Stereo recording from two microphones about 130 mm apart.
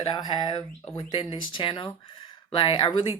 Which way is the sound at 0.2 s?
35° left (ahead or behind).